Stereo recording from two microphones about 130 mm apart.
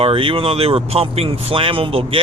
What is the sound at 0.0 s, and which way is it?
Speech, 45° right (ahead or behind).